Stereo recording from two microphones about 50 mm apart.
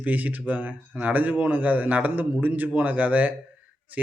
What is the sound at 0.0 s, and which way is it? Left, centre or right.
Speech, right.